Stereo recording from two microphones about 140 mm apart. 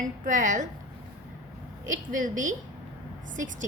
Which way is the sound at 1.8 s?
75° right (ahead or behind).